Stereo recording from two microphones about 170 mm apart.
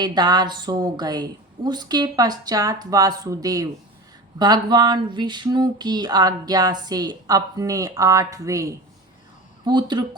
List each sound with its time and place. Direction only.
0.0 s a woman's voice: 25° right (ahead or behind)